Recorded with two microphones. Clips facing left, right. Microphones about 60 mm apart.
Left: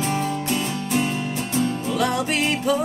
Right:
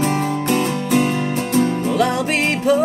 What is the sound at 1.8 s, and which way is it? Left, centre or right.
Music, right.